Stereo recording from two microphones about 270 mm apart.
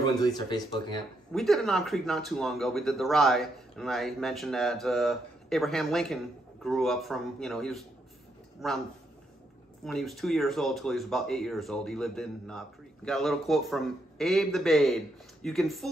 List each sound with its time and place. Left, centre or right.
0.0 s speech: centre
1.3 s speech: centre
9.8 s speech: centre